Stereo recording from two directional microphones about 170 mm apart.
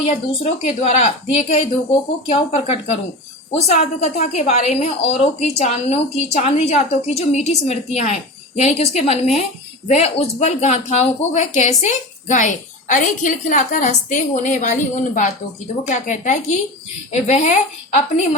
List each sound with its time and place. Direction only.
0.0 s a woman's voice: 35° left (ahead or behind)